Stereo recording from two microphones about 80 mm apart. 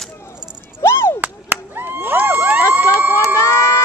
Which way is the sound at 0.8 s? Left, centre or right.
Left.